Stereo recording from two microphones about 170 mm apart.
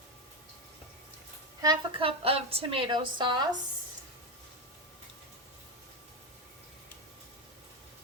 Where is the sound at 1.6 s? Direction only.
30° right (ahead or behind).